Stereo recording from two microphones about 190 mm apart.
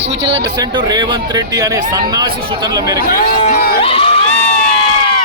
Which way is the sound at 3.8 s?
30° left (ahead or behind).